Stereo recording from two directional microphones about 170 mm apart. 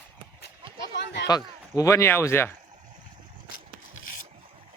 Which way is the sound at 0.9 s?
90° left.